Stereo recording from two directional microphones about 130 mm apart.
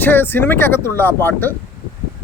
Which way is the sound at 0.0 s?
15° left (ahead or behind).